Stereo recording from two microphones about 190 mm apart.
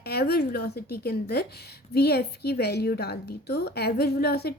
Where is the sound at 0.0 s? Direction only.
55° left (ahead or behind).